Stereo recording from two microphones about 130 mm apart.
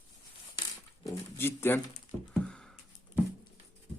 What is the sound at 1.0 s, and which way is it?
Speech, 20° left (ahead or behind).